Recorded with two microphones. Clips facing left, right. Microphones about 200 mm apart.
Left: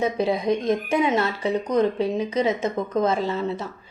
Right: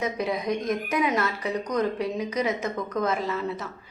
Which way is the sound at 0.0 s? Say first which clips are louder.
Left 5 dB; 30° left (ahead or behind).